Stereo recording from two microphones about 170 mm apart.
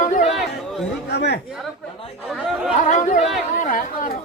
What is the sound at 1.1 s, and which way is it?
Speech, 75° left (ahead or behind).